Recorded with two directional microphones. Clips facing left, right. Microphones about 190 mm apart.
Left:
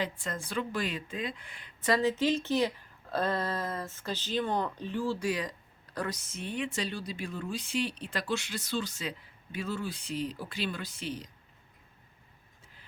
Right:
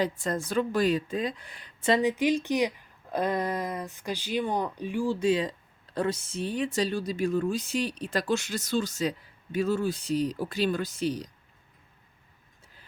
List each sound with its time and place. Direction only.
0.0 s speech: 40° right (ahead or behind)
1.8 s speech: 20° right (ahead or behind)
5.2 s speech: 25° right (ahead or behind)